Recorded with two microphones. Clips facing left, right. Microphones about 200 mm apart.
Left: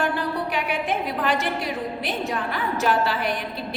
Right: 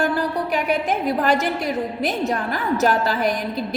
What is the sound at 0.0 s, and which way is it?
A woman's voice, 40° right (ahead or behind).